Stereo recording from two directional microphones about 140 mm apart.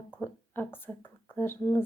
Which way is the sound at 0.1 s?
15° left (ahead or behind).